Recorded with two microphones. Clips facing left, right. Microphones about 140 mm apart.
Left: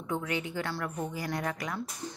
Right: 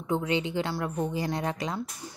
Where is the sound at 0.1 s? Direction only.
25° right (ahead or behind).